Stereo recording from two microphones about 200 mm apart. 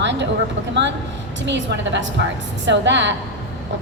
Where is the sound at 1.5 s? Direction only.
65° right (ahead or behind).